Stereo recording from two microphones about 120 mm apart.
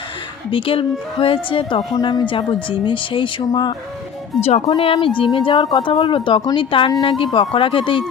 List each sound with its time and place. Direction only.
0.5 s a woman's voice: 50° left (ahead or behind)
4.4 s speech: 60° left (ahead or behind)
4.8 s a woman's voice: 50° left (ahead or behind)